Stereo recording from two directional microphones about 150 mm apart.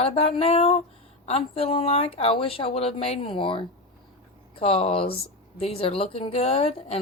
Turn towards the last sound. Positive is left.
turn(degrees=40)  # may be behind; listen again after turning